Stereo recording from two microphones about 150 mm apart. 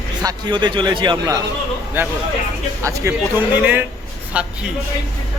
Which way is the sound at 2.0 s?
15° right (ahead or behind).